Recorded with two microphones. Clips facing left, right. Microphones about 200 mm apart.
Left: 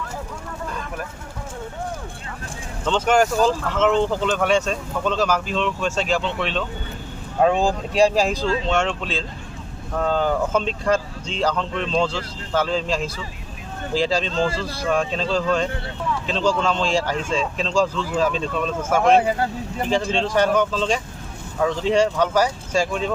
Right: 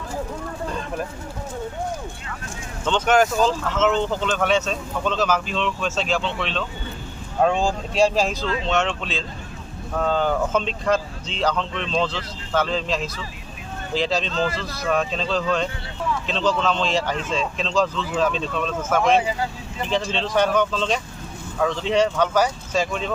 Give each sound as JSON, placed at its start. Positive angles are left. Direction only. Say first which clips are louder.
{"t": 0.7, "sound": "vehicle", "louder": "right 3 dB", "side_deg": -25}
{"t": 2.8, "sound": "speech", "louder": "even", "side_deg": 5}
{"t": 7.6, "sound": "speech", "louder": "left 2 dB", "side_deg": 15}
{"t": 14.3, "sound": "speech", "louder": "left 2 dB", "side_deg": 30}
{"t": 14.8, "sound": "speech", "louder": "left 1 dB", "side_deg": 0}
{"t": 19.2, "sound": "speech", "louder": "left 4 dB", "side_deg": 55}
{"t": 20.2, "sound": "speech", "louder": "right 1 dB", "side_deg": 10}